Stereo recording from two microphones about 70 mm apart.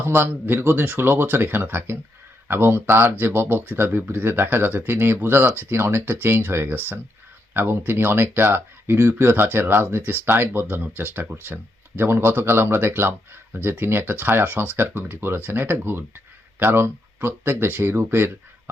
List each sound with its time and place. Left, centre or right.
0.0 s speech: right